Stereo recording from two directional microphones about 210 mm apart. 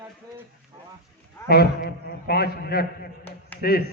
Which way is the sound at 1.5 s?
50° left (ahead or behind).